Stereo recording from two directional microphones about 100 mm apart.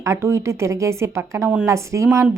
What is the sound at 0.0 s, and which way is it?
A woman's voice, 30° right (ahead or behind).